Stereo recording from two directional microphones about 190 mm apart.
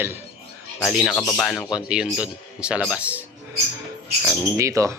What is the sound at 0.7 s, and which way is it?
Speech, centre (ahead or behind).